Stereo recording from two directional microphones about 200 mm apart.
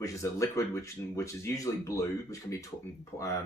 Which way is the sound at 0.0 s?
15° left (ahead or behind).